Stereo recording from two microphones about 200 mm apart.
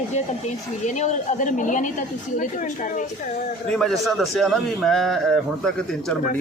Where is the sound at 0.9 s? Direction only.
35° left (ahead or behind).